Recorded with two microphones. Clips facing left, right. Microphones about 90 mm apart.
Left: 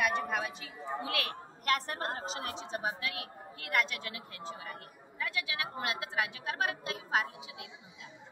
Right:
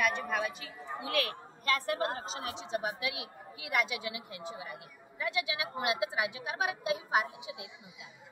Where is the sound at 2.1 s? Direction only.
45° left (ahead or behind).